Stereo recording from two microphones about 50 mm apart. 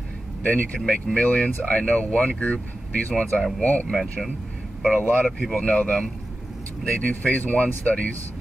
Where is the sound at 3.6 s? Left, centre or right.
Left.